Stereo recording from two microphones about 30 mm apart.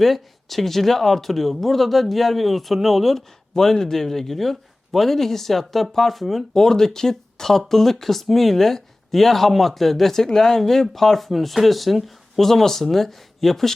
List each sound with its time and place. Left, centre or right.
0.0 s speech: centre
3.5 s speech: centre
6.5 s speech: centre
12.4 s speech: centre